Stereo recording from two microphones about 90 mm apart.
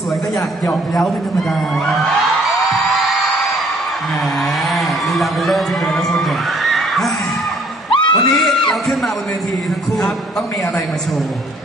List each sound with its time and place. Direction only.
0.9 s a man's voice: centre (ahead or behind)
2.6 s music: centre (ahead or behind)
4.6 s speech: centre (ahead or behind)
7.9 s neigh: 65° left (ahead or behind)
8.3 s a man's voice: centre (ahead or behind)